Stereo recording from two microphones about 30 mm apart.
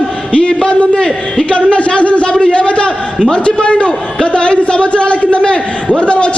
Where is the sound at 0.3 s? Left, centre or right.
Left.